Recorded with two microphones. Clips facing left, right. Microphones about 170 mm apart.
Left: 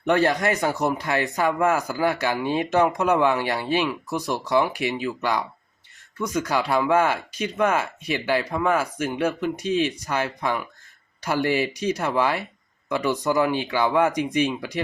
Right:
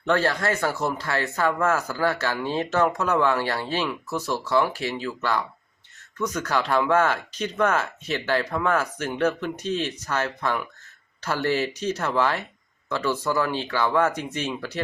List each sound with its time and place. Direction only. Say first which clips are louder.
0.0 s speech: left 3 dB; 15° left (ahead or behind)